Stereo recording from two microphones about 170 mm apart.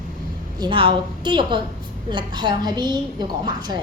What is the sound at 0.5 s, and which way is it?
A woman's voice, 30° right (ahead or behind).